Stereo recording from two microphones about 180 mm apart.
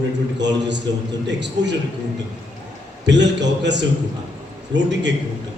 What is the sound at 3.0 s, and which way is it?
A man's voice, 75° right (ahead or behind).